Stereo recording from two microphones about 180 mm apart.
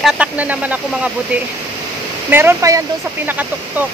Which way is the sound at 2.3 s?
15° right (ahead or behind).